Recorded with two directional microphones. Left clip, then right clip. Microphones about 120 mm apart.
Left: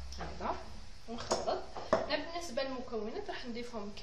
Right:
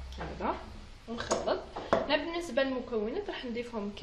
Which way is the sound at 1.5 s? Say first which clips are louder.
Right 3 dB; 25° right (ahead or behind).